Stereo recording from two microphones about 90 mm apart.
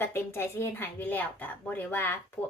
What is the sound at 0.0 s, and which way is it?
Speech, 25° left (ahead or behind).